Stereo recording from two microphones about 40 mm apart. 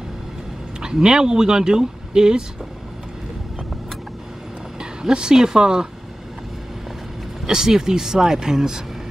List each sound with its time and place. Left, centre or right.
0.7 s speech: centre
4.7 s speech: centre
7.4 s speech: centre